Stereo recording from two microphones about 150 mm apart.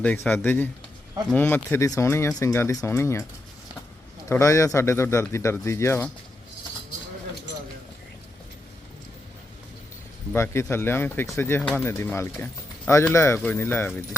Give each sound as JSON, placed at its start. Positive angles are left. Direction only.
{"t": 0.0, "sound": "speech", "side_deg": 10}
{"t": 4.3, "sound": "speech", "side_deg": 20}
{"t": 10.3, "sound": "speech", "side_deg": 15}